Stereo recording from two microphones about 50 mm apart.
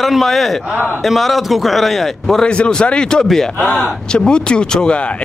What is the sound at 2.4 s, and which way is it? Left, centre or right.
A man's voice, centre.